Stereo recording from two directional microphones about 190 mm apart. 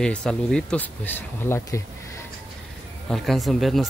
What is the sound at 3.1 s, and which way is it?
Speech, centre (ahead or behind).